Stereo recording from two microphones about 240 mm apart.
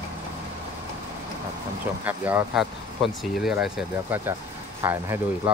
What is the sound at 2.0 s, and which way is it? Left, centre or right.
Speech, centre.